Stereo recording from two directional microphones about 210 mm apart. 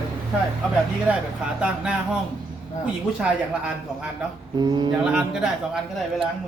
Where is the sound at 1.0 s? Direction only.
5° right (ahead or behind).